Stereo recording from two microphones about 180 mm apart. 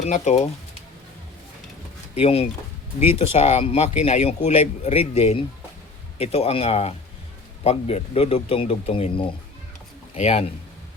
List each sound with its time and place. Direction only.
0.0 s speech: 40° left (ahead or behind)
2.2 s speech: 35° left (ahead or behind)